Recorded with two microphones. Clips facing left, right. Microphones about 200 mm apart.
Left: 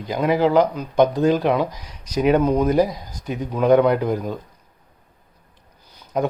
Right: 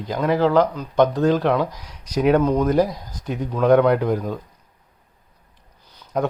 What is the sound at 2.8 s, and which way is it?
Speech, 5° left (ahead or behind).